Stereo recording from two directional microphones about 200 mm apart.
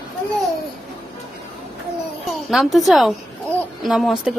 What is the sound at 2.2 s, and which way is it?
A woman's voice, centre (ahead or behind).